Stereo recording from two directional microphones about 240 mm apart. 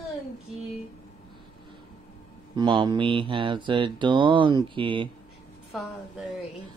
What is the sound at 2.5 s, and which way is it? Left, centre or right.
Speech, centre.